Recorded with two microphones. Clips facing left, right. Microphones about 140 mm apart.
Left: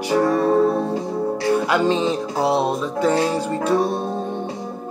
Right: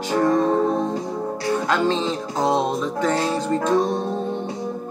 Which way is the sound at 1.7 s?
10° left (ahead or behind).